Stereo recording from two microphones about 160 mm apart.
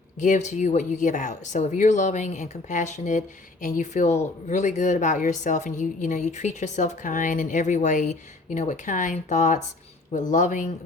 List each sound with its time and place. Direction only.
0.2 s speech: 50° left (ahead or behind)